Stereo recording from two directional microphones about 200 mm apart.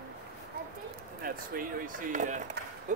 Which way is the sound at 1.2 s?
45° right (ahead or behind).